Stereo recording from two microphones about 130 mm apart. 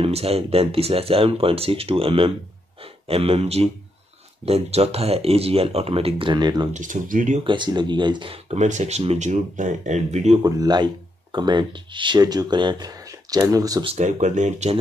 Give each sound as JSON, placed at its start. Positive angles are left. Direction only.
{"t": 0.0, "sound": "speech", "side_deg": -50}
{"t": 6.7, "sound": "speech", "side_deg": -75}
{"t": 7.4, "sound": "speech", "side_deg": -35}
{"t": 8.5, "sound": "speech", "side_deg": -65}
{"t": 10.4, "sound": "speech", "side_deg": -30}
{"t": 13.9, "sound": "speech", "side_deg": -65}